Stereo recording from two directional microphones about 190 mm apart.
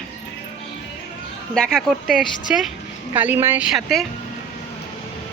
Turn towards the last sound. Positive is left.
turn(degrees=0)  # may be behind; listen again after turning